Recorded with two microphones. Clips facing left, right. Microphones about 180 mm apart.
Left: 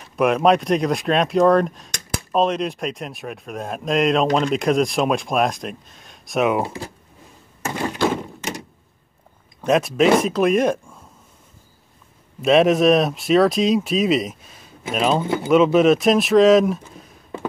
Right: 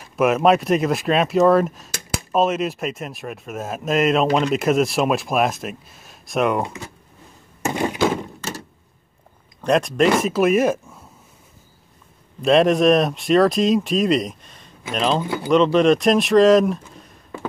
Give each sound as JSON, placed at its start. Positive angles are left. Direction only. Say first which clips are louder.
{"t": 0.0, "sound": "speech", "louder": "even", "side_deg": 0}
{"t": 6.6, "sound": "speech", "louder": "left 2 dB", "side_deg": 30}
{"t": 7.6, "sound": "thunk", "louder": "right 3 dB", "side_deg": -20}
{"t": 8.4, "sound": "a sound", "louder": "left 1 dB", "side_deg": 15}
{"t": 9.6, "sound": "speech", "louder": "even", "side_deg": 5}
{"t": 12.4, "sound": "speech", "louder": "even", "side_deg": 0}
{"t": 15.2, "sound": "speech", "louder": "left 2 dB", "side_deg": 25}
{"t": 15.5, "sound": "speech", "louder": "left 1 dB", "side_deg": 5}